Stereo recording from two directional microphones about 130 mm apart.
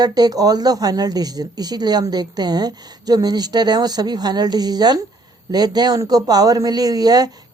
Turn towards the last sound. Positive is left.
turn(degrees=-30)  # may be behind; listen again after turning